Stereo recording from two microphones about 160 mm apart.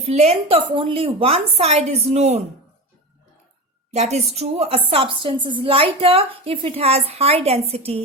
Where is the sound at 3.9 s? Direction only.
45° right (ahead or behind).